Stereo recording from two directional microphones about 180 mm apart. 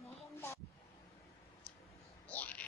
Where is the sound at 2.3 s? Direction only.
10° left (ahead or behind).